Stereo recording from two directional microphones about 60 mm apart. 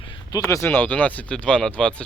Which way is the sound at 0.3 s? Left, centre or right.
Left.